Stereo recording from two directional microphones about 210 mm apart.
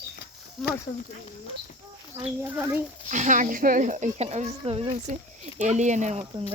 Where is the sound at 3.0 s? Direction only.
35° right (ahead or behind).